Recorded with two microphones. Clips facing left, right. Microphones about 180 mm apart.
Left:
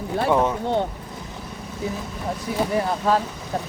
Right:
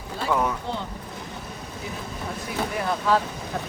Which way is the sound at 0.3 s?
25° left (ahead or behind).